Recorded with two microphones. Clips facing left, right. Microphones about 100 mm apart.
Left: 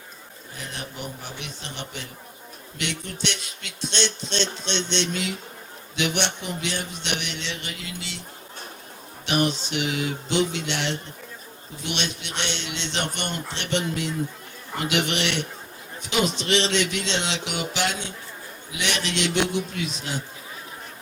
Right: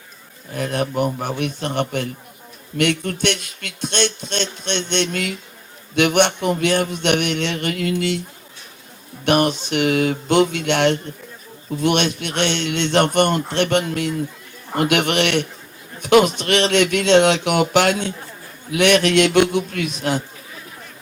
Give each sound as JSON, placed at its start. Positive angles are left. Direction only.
{"t": 0.5, "sound": "speech", "side_deg": -55}
{"t": 9.2, "sound": "speech", "side_deg": -55}